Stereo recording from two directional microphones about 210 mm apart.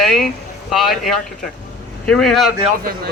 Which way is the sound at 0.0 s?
Centre (ahead or behind).